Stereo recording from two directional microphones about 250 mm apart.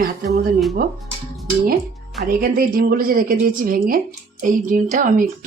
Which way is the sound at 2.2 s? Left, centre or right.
Right.